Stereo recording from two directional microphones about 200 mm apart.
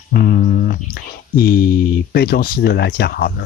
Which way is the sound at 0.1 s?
45° left (ahead or behind).